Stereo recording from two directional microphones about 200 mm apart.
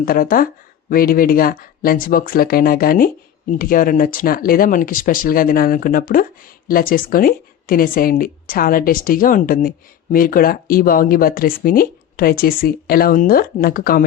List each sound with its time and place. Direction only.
0.0 s speech: 45° left (ahead or behind)